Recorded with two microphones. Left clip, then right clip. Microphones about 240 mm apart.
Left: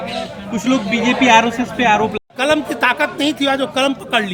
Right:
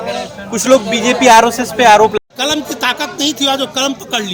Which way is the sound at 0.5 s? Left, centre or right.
Right.